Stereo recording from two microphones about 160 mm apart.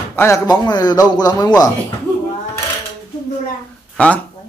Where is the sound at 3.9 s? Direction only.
10° left (ahead or behind).